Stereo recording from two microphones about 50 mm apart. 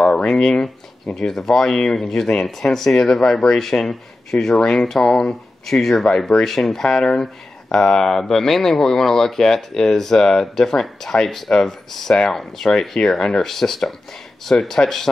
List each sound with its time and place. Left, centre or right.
0.0 s a sound: left
0.3 s speech: centre
5.0 s speech: centre
5.7 s speech: centre